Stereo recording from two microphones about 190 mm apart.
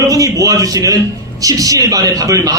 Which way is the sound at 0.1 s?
20° right (ahead or behind).